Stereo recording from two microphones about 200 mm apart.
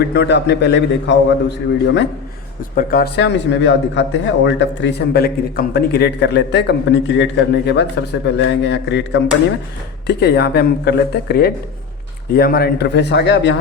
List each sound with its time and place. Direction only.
0.0 s a man's voice: 55° left (ahead or behind)
2.7 s a man's voice: 50° left (ahead or behind)